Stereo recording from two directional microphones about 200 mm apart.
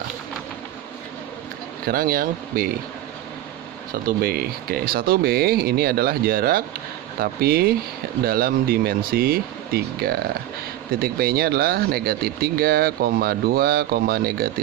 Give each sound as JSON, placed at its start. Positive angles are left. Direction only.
{"t": 1.9, "sound": "speech", "side_deg": -45}
{"t": 4.0, "sound": "speech", "side_deg": -50}